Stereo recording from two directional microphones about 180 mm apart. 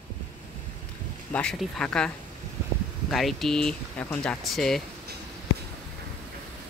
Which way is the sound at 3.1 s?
Centre (ahead or behind).